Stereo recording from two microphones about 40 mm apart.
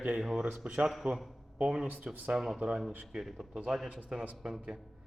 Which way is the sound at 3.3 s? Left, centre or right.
Centre.